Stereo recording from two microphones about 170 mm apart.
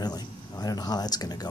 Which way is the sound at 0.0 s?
25° left (ahead or behind).